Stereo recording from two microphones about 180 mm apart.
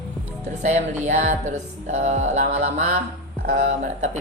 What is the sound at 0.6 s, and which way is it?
A woman's voice, 40° right (ahead or behind).